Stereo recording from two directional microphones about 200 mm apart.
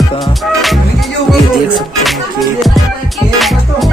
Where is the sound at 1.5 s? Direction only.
Centre (ahead or behind).